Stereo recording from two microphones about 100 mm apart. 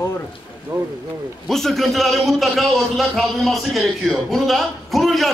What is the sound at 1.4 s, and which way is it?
A man's voice, 5° left (ahead or behind).